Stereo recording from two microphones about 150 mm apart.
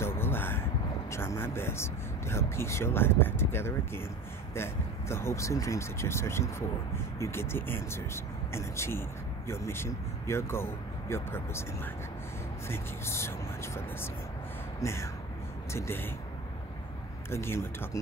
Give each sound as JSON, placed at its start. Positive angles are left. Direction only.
{"t": 0.0, "sound": "a sound", "side_deg": 15}
{"t": 1.1, "sound": "speech", "side_deg": 15}
{"t": 14.8, "sound": "speech", "side_deg": 20}
{"t": 17.3, "sound": "speech", "side_deg": 15}